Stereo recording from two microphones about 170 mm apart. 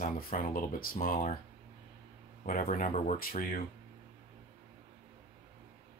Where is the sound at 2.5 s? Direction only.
55° left (ahead or behind).